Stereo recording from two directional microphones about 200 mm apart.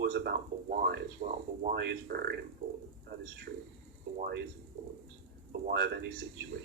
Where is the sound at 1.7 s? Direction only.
55° right (ahead or behind).